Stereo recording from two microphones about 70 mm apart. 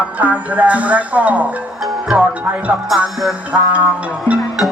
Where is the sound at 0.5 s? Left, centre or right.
Centre.